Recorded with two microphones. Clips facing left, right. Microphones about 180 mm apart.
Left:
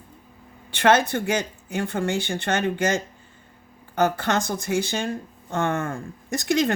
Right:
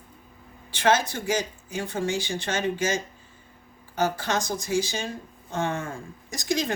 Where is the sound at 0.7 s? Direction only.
60° left (ahead or behind).